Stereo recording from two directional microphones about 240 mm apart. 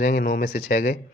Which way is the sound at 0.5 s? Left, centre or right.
Left.